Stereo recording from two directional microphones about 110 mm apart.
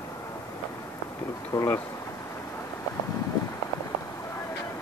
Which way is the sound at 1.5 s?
30° left (ahead or behind).